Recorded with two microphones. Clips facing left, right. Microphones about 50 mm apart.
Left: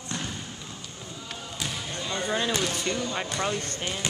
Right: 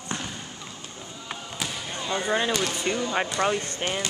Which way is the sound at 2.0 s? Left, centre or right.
Centre.